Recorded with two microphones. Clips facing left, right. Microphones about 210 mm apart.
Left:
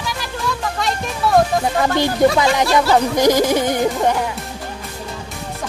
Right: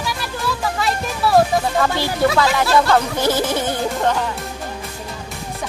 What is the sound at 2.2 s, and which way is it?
Music, 20° left (ahead or behind).